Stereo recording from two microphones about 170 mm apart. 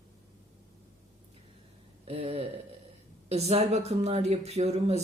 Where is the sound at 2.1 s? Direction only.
35° right (ahead or behind).